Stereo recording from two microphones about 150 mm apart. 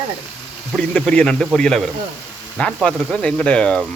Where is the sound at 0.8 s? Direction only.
5° left (ahead or behind).